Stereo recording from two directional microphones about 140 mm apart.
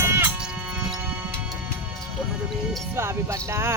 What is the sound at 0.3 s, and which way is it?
Music, 5° right (ahead or behind).